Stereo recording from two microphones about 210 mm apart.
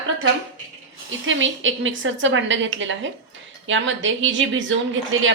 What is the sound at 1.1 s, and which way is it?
A woman's voice, 65° right (ahead or behind).